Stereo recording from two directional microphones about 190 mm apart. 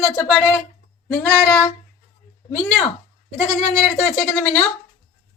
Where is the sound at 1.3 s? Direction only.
5° left (ahead or behind).